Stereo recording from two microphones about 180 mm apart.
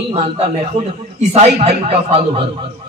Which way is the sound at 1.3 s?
35° right (ahead or behind).